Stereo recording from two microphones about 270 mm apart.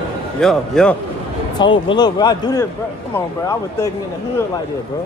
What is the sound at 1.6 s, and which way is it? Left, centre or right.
Speech, centre.